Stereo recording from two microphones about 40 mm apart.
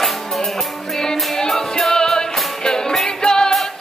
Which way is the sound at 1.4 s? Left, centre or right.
Centre.